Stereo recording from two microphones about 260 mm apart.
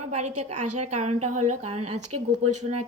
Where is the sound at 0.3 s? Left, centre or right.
Right.